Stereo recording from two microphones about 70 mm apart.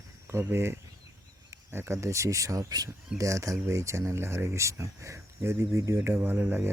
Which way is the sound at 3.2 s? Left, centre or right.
Right.